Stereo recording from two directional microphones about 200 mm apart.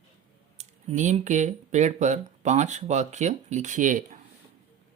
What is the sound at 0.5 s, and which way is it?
Speech, 35° right (ahead or behind).